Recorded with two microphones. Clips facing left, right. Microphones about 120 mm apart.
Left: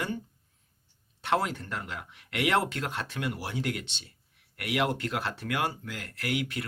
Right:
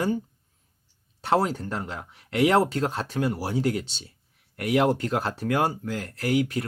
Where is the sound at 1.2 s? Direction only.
35° right (ahead or behind).